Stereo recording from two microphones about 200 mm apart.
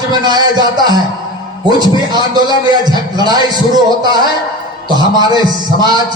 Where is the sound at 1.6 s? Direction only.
20° right (ahead or behind).